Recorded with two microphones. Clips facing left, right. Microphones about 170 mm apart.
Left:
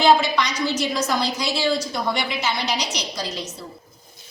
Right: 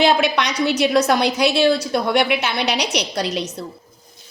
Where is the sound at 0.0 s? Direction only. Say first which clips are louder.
Right 1 dB; 65° right (ahead or behind).